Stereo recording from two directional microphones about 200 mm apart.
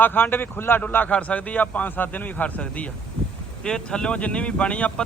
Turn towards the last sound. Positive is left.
turn(degrees=5)  # may be behind; listen again after turning